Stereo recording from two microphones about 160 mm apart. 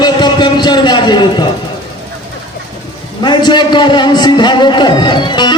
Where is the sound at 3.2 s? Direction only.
30° left (ahead or behind).